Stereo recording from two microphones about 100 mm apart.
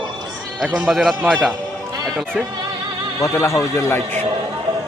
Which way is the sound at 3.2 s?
30° left (ahead or behind).